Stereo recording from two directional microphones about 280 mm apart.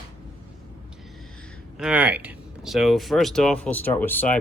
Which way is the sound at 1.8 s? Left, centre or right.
Centre.